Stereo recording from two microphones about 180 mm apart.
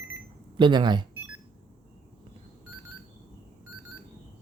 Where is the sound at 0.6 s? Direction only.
25° right (ahead or behind).